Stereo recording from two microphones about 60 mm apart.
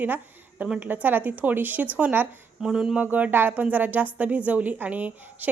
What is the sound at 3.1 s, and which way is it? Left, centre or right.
A woman's voice, right.